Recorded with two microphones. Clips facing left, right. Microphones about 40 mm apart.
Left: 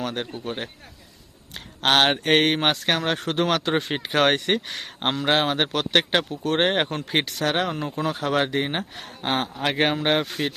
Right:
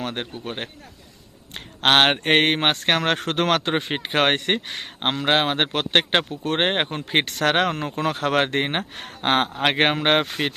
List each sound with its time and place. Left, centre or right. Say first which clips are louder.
0.0 s speech: even; right
2.7 s speech: right 3 dB; right
3.8 s speech: even; right
7.3 s speech: right 4 dB; right